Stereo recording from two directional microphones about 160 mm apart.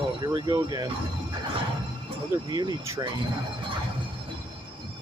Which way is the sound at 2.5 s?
25° right (ahead or behind).